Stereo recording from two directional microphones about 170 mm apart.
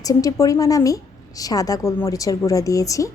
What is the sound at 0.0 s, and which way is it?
A woman's voice, 20° left (ahead or behind).